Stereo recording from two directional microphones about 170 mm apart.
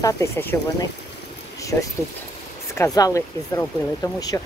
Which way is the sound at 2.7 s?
20° left (ahead or behind).